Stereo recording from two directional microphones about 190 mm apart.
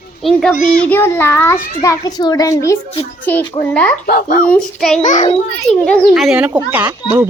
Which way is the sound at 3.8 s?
5° left (ahead or behind).